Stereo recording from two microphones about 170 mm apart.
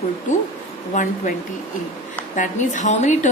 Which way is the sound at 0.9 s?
45° left (ahead or behind).